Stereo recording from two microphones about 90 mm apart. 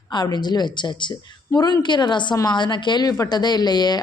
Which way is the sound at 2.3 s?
40° left (ahead or behind).